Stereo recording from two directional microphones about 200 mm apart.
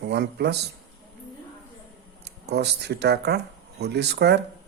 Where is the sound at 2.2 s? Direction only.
55° right (ahead or behind).